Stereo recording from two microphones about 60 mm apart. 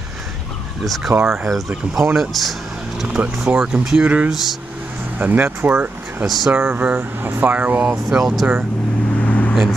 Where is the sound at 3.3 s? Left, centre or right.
Centre.